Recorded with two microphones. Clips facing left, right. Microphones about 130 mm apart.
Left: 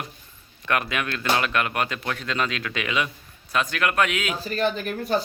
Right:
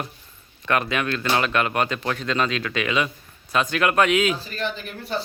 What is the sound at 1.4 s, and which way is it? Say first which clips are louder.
Speech: right 2 dB; 25° right (ahead or behind).